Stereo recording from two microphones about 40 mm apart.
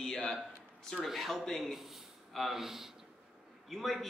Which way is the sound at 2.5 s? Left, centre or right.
Centre.